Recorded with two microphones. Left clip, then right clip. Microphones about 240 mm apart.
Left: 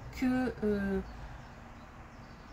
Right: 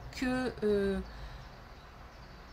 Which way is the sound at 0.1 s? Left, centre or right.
Right.